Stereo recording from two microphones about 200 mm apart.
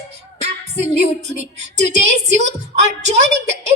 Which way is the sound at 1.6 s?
35° right (ahead or behind).